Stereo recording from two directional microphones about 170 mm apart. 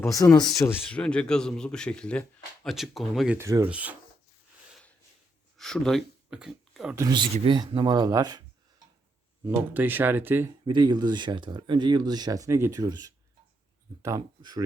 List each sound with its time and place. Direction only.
0.0 s a man's voice: 15° left (ahead or behind); by 3.3 s centre (ahead or behind)
3.3 s speech: 15° right (ahead or behind)
5.5 s speech: 5° left (ahead or behind)
6.9 s speech: 20° right (ahead or behind)
10.7 s speech: 25° right (ahead or behind)